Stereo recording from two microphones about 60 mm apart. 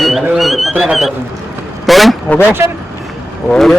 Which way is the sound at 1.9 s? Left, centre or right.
Centre.